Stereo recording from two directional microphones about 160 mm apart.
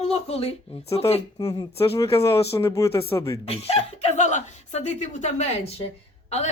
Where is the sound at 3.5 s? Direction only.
40° left (ahead or behind).